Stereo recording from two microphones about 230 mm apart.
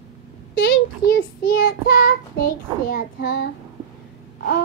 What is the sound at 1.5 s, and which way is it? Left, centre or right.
Child singing, left.